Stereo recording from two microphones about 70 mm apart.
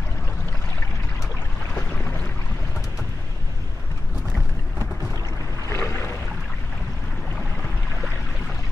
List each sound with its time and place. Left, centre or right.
5.7 s boat: left